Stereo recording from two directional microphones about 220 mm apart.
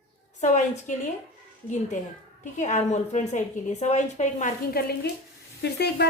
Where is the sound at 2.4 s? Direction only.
35° left (ahead or behind).